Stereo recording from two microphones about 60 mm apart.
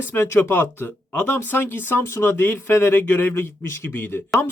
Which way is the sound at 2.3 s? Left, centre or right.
Left.